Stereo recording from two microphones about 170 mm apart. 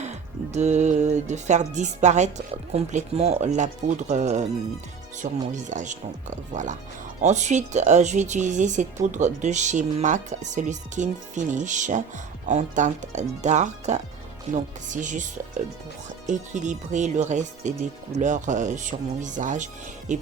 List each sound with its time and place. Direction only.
0.0 s speech: 40° right (ahead or behind)